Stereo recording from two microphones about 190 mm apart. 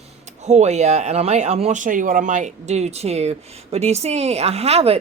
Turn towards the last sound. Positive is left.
turn(degrees=-35)  # may be behind; listen again after turning